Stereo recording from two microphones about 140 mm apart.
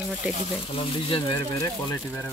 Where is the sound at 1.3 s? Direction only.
20° left (ahead or behind).